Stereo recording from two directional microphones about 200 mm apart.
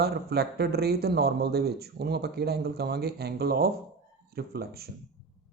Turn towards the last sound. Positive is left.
turn(degrees=-50)  # may be behind; listen again after turning